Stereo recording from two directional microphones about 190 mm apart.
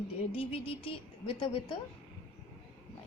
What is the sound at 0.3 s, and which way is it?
A woman's voice, 30° left (ahead or behind).